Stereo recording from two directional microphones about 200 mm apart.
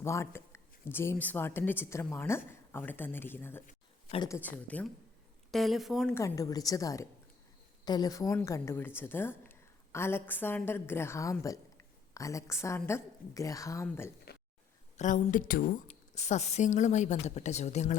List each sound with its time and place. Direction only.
0.0 s speech: 15° left (ahead or behind)
4.1 s a woman's voice: 20° left (ahead or behind)
4.4 s speech: 10° left (ahead or behind)
6.1 s a woman's voice: 15° left (ahead or behind)
14.9 s a woman's voice: 40° left (ahead or behind)